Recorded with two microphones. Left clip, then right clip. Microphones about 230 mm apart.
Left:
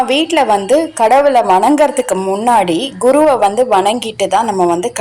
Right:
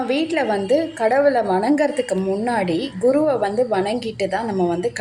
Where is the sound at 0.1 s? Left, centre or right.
Centre.